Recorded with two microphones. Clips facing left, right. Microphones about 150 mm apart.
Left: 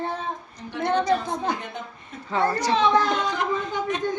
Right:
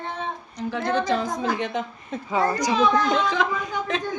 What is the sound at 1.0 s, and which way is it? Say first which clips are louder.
Speech: left 1 dB; 90° right.